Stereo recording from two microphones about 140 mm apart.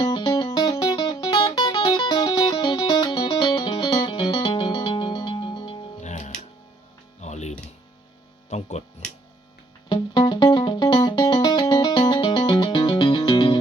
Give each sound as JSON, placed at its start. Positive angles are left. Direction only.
{"t": 0.0, "sound": "music", "side_deg": 30}
{"t": 6.0, "sound": "music", "side_deg": 55}
{"t": 8.4, "sound": "a sound", "side_deg": 55}
{"t": 9.9, "sound": "music", "side_deg": 35}